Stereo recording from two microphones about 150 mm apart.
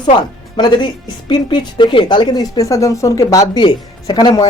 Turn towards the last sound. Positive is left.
turn(degrees=25)  # may be behind; listen again after turning